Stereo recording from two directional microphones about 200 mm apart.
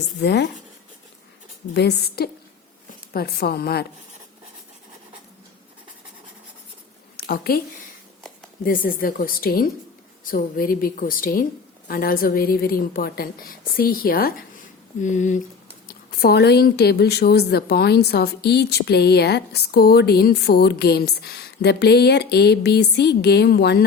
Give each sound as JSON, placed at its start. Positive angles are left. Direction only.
{"t": 0.2, "sound": "speech", "side_deg": 60}
{"t": 1.7, "sound": "a woman's voice", "side_deg": 55}
{"t": 7.2, "sound": "a woman's voice", "side_deg": 50}
{"t": 8.6, "sound": "a woman's voice", "side_deg": 45}
{"t": 15.9, "sound": "speech", "side_deg": 50}